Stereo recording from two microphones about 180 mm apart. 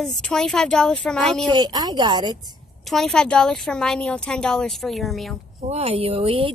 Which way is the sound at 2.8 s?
Centre (ahead or behind).